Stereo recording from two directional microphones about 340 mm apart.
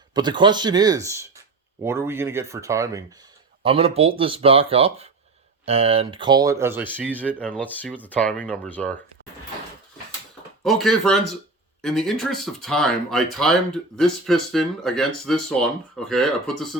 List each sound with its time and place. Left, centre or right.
0.1 s speech: centre
10.6 s speech: centre